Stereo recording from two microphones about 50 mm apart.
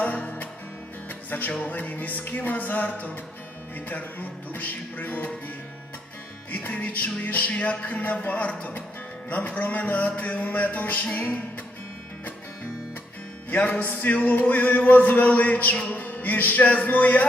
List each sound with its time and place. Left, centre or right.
0.0 s music: left
6.5 s music: left
9.6 s music: left
13.5 s music: left
13.8 s music: left